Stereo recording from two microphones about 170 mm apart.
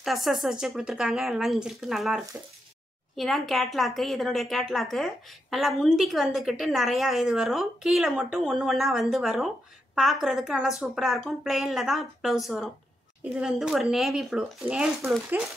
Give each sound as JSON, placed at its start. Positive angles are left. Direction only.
{"t": 0.0, "sound": "a woman's voice", "side_deg": 0}